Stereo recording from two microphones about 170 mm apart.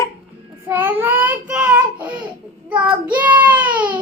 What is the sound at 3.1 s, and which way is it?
Child singing, 10° right (ahead or behind).